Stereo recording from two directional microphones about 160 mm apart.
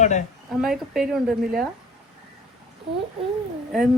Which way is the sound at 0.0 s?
50° left (ahead or behind).